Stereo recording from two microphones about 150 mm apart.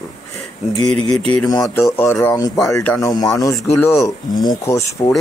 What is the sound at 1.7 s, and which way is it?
Speech, 15° left (ahead or behind).